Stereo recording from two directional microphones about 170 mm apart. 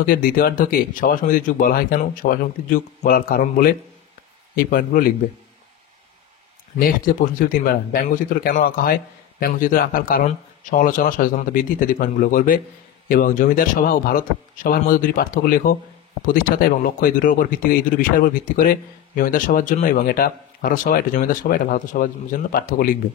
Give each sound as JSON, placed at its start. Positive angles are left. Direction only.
{"t": 0.0, "sound": "speech", "side_deg": 60}
{"t": 6.8, "sound": "speech", "side_deg": 55}